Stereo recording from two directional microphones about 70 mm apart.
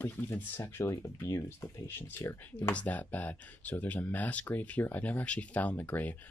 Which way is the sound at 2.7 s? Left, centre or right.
Left.